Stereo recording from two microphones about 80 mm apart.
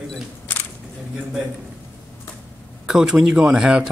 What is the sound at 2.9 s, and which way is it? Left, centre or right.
Speech, centre.